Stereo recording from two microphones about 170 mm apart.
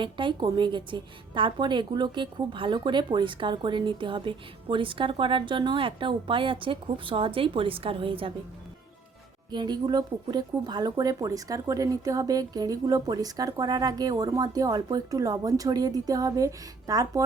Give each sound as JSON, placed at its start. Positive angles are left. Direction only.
{"t": 0.0, "sound": "a woman's voice", "side_deg": -30}
{"t": 9.5, "sound": "a woman's voice", "side_deg": -25}